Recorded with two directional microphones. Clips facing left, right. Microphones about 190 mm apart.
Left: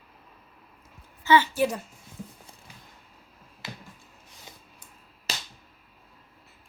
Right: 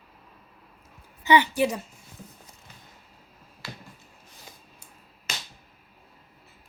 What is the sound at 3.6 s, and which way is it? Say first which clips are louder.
Finger snapping: even; 20° left (ahead or behind).